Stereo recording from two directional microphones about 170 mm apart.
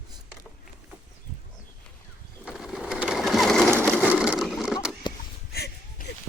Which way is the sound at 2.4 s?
Centre (ahead or behind).